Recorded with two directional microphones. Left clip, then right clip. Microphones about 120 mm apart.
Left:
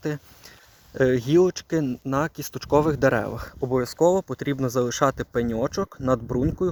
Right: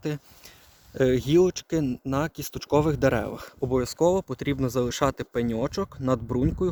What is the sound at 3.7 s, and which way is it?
Speech, 65° right (ahead or behind).